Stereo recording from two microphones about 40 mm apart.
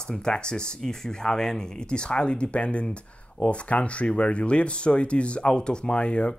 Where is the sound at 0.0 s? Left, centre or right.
Centre.